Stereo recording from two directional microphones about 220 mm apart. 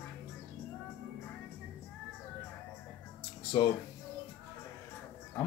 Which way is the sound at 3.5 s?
20° left (ahead or behind).